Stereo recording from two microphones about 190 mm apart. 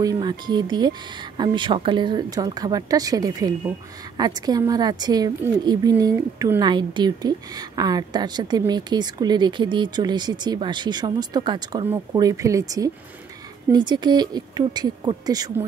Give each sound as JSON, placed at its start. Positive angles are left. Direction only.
{"t": 0.0, "sound": "a woman's voice", "side_deg": -20}